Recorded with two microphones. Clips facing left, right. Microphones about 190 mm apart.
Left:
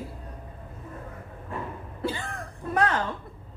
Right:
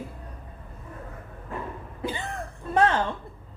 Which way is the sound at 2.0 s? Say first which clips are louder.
Left 1 dB; 15° right (ahead or behind).